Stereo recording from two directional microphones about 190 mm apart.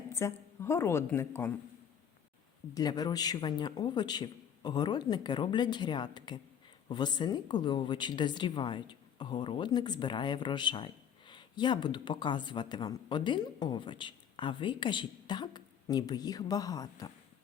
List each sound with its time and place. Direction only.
0.1 s a woman's voice: 15° left (ahead or behind)
2.7 s speech: 20° left (ahead or behind)